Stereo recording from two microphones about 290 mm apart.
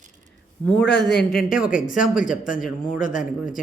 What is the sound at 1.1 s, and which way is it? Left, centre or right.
Speech, left.